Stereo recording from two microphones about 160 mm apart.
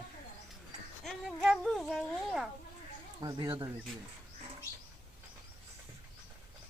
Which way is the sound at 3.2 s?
25° right (ahead or behind).